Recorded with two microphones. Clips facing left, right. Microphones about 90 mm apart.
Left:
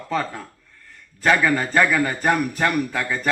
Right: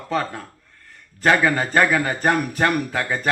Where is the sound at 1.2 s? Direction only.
35° right (ahead or behind).